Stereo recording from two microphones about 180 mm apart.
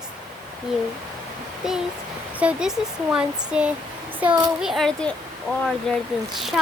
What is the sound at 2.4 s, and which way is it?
Speech, 5° right (ahead or behind).